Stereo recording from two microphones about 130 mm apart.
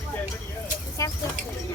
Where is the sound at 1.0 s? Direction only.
25° left (ahead or behind).